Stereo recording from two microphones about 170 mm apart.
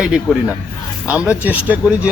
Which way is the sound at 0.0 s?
5° right (ahead or behind).